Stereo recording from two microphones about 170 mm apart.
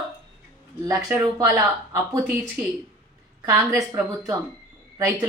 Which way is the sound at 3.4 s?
20° right (ahead or behind).